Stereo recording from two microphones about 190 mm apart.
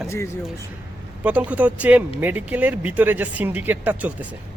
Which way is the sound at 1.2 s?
10° right (ahead or behind).